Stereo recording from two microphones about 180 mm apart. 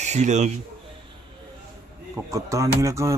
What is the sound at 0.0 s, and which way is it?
Speech, 40° right (ahead or behind).